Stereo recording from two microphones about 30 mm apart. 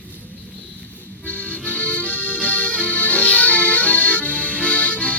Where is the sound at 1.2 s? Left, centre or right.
Left.